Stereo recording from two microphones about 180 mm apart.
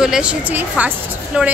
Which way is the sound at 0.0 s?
5° right (ahead or behind).